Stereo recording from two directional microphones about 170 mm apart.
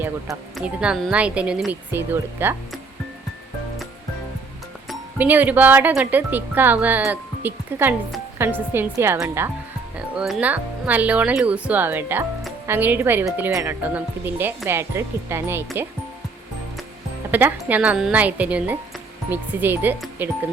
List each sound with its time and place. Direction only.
0.5 s speech: 5° right (ahead or behind)
5.1 s speech: 10° right (ahead or behind)
10.2 s speech: 5° right (ahead or behind)
17.3 s speech: 10° right (ahead or behind)